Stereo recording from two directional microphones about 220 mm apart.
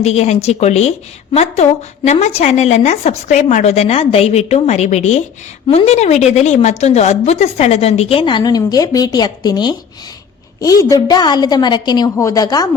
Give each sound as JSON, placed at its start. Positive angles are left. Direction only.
{"t": 0.0, "sound": "a woman's voice", "side_deg": 30}